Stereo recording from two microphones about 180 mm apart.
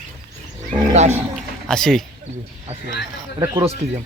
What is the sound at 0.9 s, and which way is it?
Speech, 40° right (ahead or behind).